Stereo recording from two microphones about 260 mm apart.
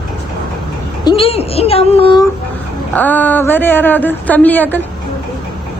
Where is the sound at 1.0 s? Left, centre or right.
Left.